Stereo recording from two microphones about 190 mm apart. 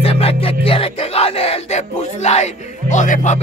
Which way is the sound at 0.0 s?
30° left (ahead or behind).